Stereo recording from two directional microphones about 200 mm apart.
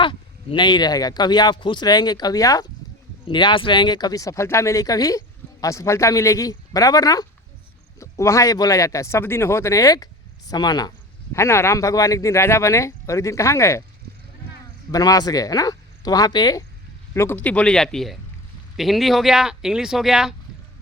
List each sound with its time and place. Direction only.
0.0 s speech: 25° left (ahead or behind)
14.9 s speech: 20° left (ahead or behind)
17.2 s speech: 10° left (ahead or behind)